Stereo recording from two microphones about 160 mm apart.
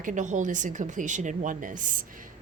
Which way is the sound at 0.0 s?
50° right (ahead or behind).